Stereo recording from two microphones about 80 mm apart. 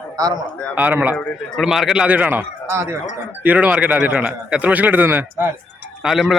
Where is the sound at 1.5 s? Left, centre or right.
Centre.